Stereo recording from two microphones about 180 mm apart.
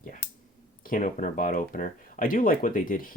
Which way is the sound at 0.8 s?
50° left (ahead or behind).